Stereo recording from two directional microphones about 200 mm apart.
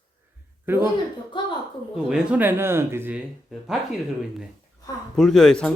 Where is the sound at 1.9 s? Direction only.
5° right (ahead or behind).